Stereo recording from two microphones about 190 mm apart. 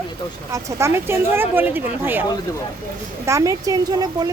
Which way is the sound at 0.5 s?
15° right (ahead or behind).